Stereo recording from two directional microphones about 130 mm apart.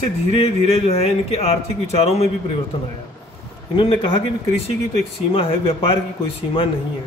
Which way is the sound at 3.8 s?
45° left (ahead or behind).